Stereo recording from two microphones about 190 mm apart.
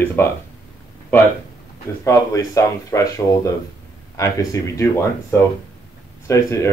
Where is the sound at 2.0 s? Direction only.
15° left (ahead or behind).